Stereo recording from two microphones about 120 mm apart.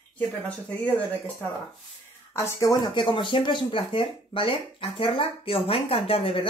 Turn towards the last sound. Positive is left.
turn(degrees=50)  # may be behind; listen again after turning